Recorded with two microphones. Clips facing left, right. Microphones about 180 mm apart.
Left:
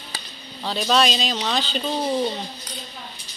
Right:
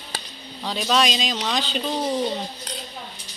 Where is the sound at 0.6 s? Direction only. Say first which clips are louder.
Left 1 dB; centre (ahead or behind).